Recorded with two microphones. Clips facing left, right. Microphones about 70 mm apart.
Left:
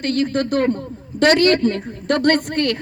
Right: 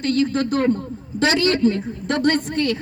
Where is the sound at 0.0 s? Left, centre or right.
Left.